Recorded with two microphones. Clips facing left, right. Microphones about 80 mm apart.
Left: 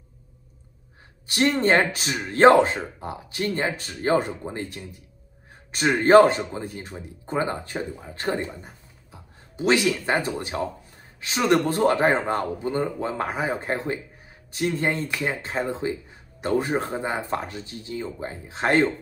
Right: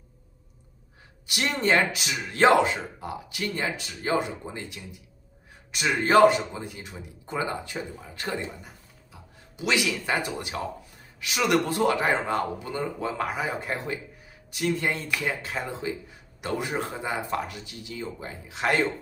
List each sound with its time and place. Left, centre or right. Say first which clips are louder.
1.2 s speech: left 5 dB; left